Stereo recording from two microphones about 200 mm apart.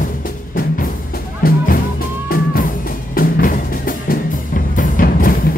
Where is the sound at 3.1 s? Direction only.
45° left (ahead or behind).